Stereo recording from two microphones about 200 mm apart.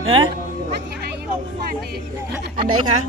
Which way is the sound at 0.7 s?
55° right (ahead or behind).